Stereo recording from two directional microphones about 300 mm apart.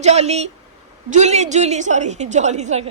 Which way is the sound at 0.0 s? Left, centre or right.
Right.